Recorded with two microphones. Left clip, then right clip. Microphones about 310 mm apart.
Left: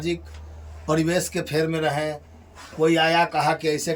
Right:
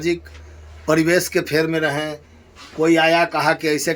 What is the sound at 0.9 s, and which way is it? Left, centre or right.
Speech, centre.